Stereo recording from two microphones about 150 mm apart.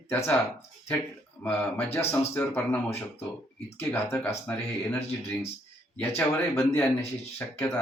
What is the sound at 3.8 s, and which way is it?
A man's voice, 15° left (ahead or behind).